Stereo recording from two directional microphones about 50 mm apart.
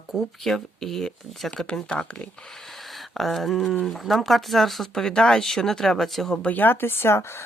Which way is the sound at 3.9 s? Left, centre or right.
Centre.